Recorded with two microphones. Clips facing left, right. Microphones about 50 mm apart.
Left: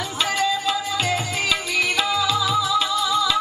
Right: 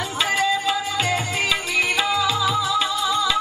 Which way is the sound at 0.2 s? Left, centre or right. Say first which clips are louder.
Right 1 dB; centre.